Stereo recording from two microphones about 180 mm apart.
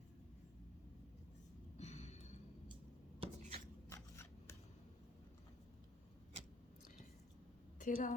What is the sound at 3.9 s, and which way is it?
Scissors, 15° left (ahead or behind).